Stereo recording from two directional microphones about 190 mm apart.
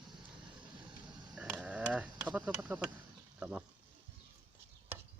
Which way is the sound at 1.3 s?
5° right (ahead or behind).